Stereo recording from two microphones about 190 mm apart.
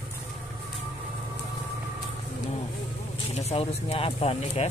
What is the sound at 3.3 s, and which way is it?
Speech, 35° left (ahead or behind).